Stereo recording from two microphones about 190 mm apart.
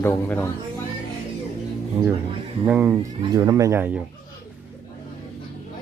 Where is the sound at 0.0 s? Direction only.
10° left (ahead or behind).